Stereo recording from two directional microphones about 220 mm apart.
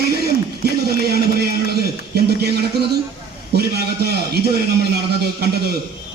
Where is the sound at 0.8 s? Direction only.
45° right (ahead or behind).